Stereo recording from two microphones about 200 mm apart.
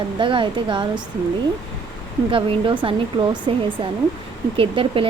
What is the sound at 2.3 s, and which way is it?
Speech, 25° right (ahead or behind).